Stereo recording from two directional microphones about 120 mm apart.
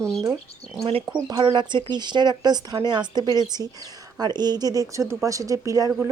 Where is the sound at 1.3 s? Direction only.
35° right (ahead or behind).